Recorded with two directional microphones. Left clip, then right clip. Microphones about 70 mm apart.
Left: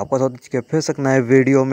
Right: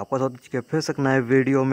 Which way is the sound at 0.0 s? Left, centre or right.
Left.